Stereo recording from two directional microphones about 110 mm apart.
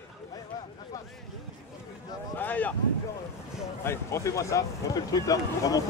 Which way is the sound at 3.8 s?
25° left (ahead or behind).